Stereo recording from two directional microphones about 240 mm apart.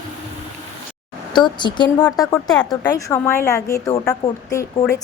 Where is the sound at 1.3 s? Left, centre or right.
Centre.